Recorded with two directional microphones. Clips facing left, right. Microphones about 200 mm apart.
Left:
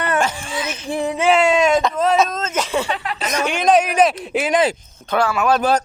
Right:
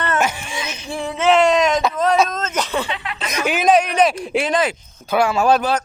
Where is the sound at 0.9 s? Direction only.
15° left (ahead or behind).